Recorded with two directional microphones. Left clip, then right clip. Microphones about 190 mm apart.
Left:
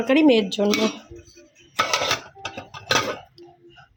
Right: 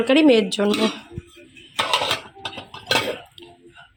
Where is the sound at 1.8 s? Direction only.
20° left (ahead or behind).